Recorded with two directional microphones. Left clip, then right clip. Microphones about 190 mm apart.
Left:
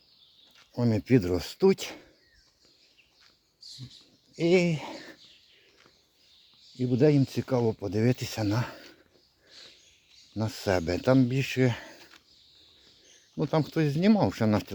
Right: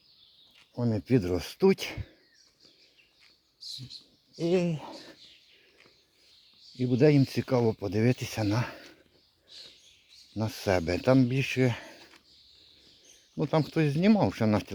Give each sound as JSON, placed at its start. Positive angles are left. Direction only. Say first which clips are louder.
{"t": 0.7, "sound": "speech", "louder": "left 3 dB", "side_deg": 15}
{"t": 4.4, "sound": "speech", "louder": "left 4 dB", "side_deg": 20}
{"t": 6.7, "sound": "speech", "louder": "even", "side_deg": -5}
{"t": 10.3, "sound": "speech", "louder": "even", "side_deg": 0}
{"t": 13.3, "sound": "speech", "louder": "even", "side_deg": 0}